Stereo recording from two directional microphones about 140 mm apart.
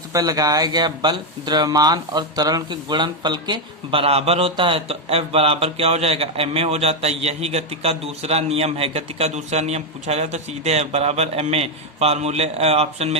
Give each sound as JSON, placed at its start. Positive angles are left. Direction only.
{"t": 0.1, "sound": "speech", "side_deg": -25}